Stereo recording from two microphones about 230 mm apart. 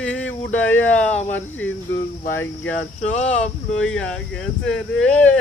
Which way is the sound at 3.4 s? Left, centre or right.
Centre.